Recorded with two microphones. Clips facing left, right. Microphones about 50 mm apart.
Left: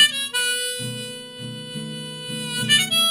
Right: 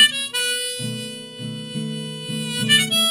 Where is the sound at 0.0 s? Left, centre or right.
Centre.